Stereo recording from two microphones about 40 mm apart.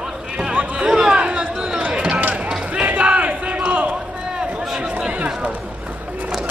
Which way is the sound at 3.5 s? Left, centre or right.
Right.